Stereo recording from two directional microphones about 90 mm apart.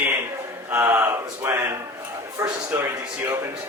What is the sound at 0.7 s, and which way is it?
A man's voice, 25° right (ahead or behind).